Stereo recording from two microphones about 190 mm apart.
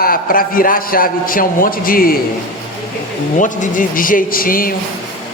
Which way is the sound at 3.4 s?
40° left (ahead or behind).